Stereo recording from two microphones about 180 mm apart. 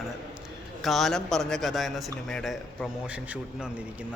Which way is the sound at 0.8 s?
Centre (ahead or behind).